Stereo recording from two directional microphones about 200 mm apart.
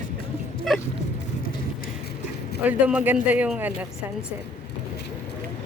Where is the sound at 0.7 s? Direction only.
Centre (ahead or behind).